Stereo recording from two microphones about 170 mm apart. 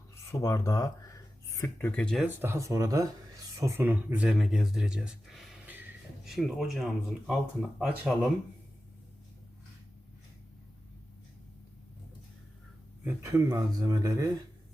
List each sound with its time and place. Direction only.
0.3 s speech: 20° left (ahead or behind)
2.2 s speech: 15° right (ahead or behind)
13.1 s speech: 15° right (ahead or behind)